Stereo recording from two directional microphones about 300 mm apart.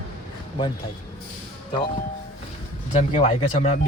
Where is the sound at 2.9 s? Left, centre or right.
Left.